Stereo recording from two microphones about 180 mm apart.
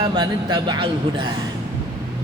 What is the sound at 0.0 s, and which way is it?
A man's voice, 25° right (ahead or behind).